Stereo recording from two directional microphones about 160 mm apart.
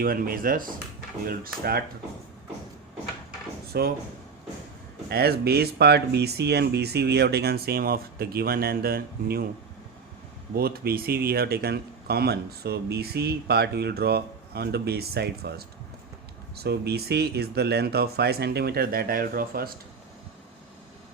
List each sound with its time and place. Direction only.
0.0 s speech: 65° right (ahead or behind)
1.2 s speech: 70° right (ahead or behind)
3.7 s speech: 75° right (ahead or behind)
5.0 s speech: 85° right
10.5 s speech: 70° right (ahead or behind)